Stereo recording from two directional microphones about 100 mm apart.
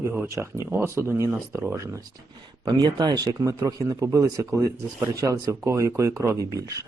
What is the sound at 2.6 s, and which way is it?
Speech, 40° right (ahead or behind).